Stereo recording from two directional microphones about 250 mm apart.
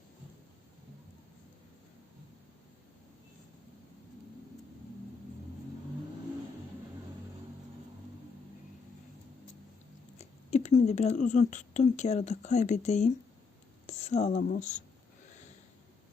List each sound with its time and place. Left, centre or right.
10.2 s speech: left
13.8 s a sound: left
14.4 s speech: left